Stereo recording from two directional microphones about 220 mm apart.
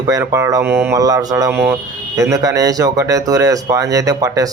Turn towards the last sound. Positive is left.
turn(degrees=-15)  # may be behind; listen again after turning